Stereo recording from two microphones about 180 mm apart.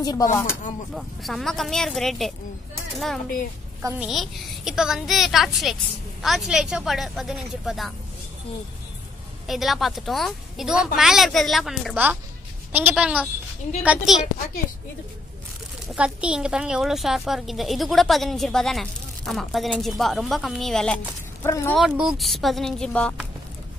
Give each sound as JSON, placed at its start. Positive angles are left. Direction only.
{"t": 0.0, "sound": "speech", "side_deg": 20}
{"t": 0.9, "sound": "a woman's voice", "side_deg": 0}
{"t": 4.0, "sound": "a woman's voice", "side_deg": 0}
{"t": 9.5, "sound": "a woman's voice", "side_deg": 0}
{"t": 15.9, "sound": "a woman's voice", "side_deg": -5}
{"t": 21.5, "sound": "speech", "side_deg": 15}
{"t": 21.7, "sound": "a woman's voice", "side_deg": 0}